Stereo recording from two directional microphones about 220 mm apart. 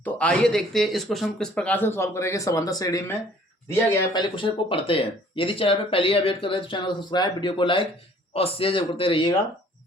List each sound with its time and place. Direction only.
0.0 s speech: 5° left (ahead or behind); by 9.3 s 25° left (ahead or behind)